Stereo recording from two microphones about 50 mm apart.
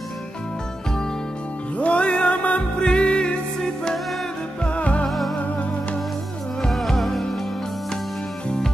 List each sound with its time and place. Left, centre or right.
1.8 s music: left
4.6 s music: left
6.7 s music: centre